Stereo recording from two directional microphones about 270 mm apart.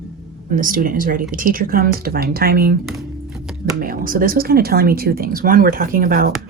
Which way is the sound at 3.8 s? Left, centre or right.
Right.